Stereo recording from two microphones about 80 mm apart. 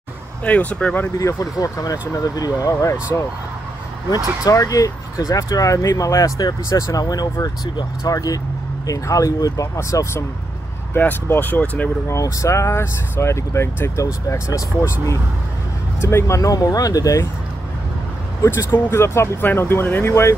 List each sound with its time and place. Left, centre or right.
0.4 s speech: centre
1.1 s speech: left
4.5 s speech: left
10.9 s speech: left
12.1 s speech: left
18.4 s speech: left